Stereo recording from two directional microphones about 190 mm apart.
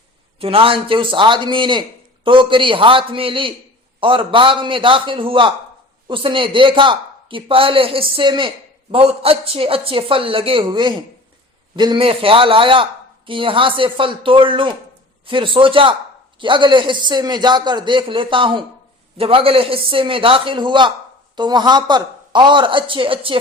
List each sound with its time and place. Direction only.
0.3 s speech: 30° right (ahead or behind)